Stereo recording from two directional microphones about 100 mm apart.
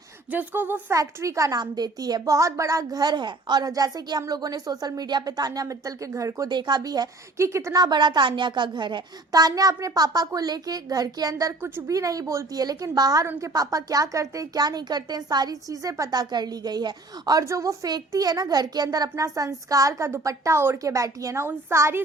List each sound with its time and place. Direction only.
0.3 s speech: 20° right (ahead or behind)
0.9 s a woman's voice: 30° right (ahead or behind)
6.5 s a woman's voice: 45° right (ahead or behind); by 7.8 s 30° right (ahead or behind)
7.8 s a woman's voice: 45° right (ahead or behind)
17.4 s a woman's voice: 30° right (ahead or behind)